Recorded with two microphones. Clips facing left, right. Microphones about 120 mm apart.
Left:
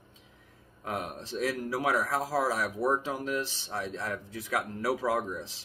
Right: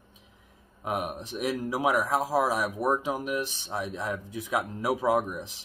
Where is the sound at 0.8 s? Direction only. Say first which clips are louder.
Right 4 dB; 15° right (ahead or behind).